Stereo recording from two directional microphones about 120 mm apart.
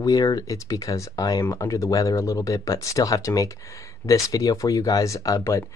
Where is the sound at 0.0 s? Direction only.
30° left (ahead or behind).